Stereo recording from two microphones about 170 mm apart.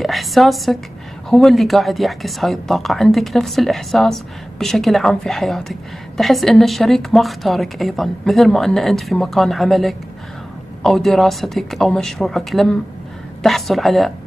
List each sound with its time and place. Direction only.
0.0 s a woman's voice: centre (ahead or behind)